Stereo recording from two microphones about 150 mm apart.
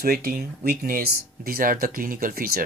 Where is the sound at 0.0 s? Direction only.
85° right.